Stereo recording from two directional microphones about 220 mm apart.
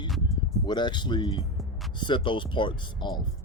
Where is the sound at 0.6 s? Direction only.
20° left (ahead or behind).